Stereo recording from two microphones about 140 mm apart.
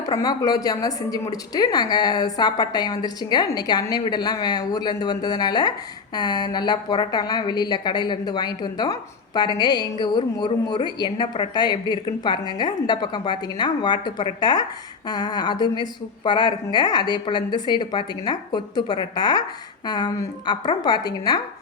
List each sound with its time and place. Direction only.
0.0 s a woman's voice: 25° left (ahead or behind)